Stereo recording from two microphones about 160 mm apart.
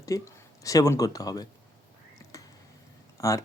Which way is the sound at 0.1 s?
20° left (ahead or behind).